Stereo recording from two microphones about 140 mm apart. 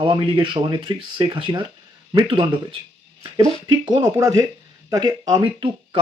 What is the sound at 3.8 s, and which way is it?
Speech, 30° right (ahead or behind).